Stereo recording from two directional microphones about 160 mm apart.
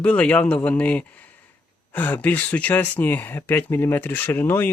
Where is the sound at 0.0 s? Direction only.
10° left (ahead or behind).